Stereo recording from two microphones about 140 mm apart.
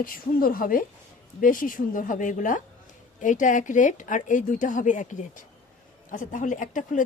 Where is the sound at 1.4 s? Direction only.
75° left (ahead or behind).